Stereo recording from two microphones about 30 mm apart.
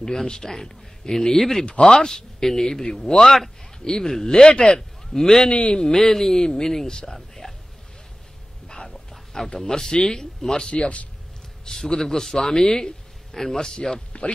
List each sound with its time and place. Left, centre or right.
0.0 s a man's voice: centre
1.4 s speech: centre
1.7 s speech: left
2.0 s speech: centre
3.2 s speech: centre
3.8 s a man's voice: left
5.5 s speech: left
5.9 s speech: centre
7.4 s a sound: left
8.8 s a sound: centre
9.5 s speech: centre
10.7 s speech: left
11.6 s a man's voice: left
14.2 s speech: left